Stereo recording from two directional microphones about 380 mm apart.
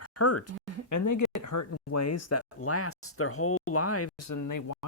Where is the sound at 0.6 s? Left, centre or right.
Left.